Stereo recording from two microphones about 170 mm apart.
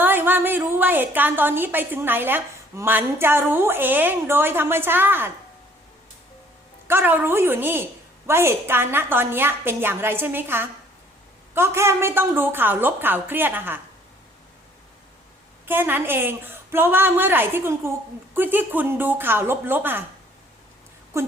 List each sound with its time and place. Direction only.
0.0 s a woman's voice: 10° right (ahead or behind)
6.8 s a woman's voice: 15° right (ahead or behind)
15.6 s a woman's voice: 10° right (ahead or behind)
21.1 s a sound: 15° right (ahead or behind)